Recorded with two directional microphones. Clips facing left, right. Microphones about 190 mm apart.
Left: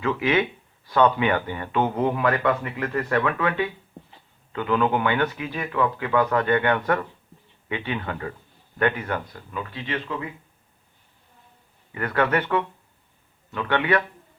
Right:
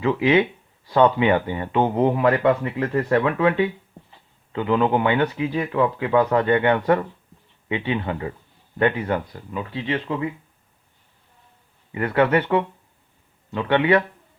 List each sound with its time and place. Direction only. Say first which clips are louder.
0.0 s a man's voice: right 4 dB; 25° right (ahead or behind)
11.9 s a man's voice: right 4 dB; 20° right (ahead or behind)